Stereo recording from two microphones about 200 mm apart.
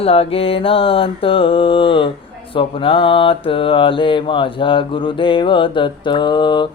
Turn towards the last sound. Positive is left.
turn(degrees=25)  # may be behind; listen again after turning